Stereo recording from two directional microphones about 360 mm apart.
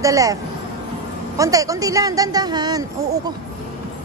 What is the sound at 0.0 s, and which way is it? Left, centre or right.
Speech, centre.